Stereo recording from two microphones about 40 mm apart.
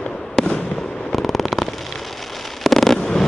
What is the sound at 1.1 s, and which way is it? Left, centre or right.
Fireworks, centre.